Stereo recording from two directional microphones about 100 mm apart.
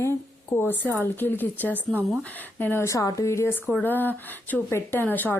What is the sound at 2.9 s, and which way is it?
A woman's voice, 35° left (ahead or behind).